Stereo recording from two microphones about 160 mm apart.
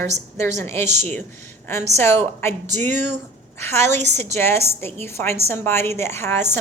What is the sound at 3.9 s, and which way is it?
Speech, 45° right (ahead or behind).